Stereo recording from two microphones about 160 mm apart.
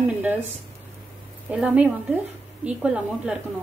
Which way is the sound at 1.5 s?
10° right (ahead or behind).